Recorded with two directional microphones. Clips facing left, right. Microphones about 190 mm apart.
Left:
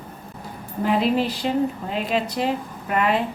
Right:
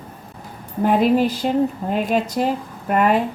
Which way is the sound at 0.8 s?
45° right (ahead or behind).